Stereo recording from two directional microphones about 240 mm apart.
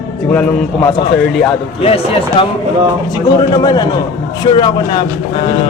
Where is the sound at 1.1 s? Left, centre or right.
Centre.